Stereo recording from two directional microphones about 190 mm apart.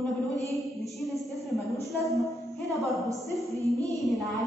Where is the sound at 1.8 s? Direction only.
Centre (ahead or behind).